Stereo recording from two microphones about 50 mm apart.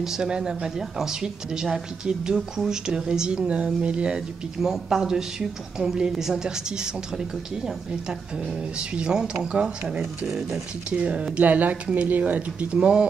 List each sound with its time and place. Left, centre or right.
0.0 s speech: centre; by 12.6 s right
12.7 s speech: centre